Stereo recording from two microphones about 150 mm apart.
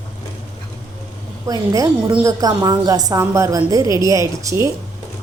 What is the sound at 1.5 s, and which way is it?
A woman's voice, 25° right (ahead or behind).